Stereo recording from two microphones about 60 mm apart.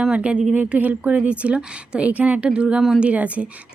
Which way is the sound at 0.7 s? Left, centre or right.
Right.